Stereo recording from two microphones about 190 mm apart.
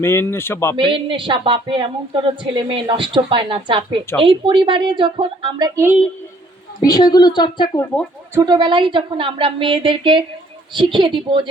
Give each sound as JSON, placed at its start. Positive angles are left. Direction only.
{"t": 0.0, "sound": "speech", "side_deg": 15}
{"t": 0.8, "sound": "speech", "side_deg": -25}
{"t": 6.7, "sound": "a woman's voice", "side_deg": 20}
{"t": 8.4, "sound": "speech", "side_deg": -20}